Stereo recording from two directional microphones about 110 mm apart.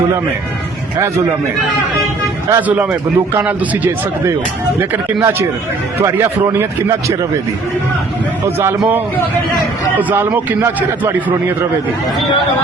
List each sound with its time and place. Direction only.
2.5 s a man's voice: 15° right (ahead or behind)
10.0 s a man's voice: 15° right (ahead or behind)